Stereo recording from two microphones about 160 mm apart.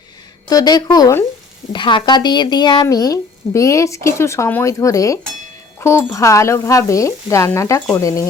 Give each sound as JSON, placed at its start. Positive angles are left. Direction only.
{"t": 0.4, "sound": "speech", "side_deg": 25}